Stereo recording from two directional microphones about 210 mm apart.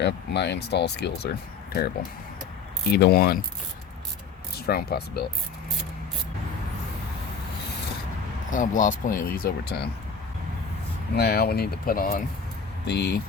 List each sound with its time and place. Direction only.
0.0 s speech: 55° left (ahead or behind)
2.9 s speech: 50° left (ahead or behind)
4.5 s speech: 50° left (ahead or behind)
8.4 s speech: 40° left (ahead or behind)
11.2 s speech: 50° left (ahead or behind)